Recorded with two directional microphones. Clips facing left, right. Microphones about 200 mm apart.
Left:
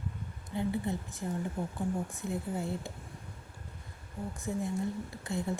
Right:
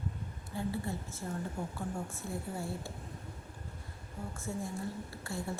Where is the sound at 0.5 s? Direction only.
20° left (ahead or behind).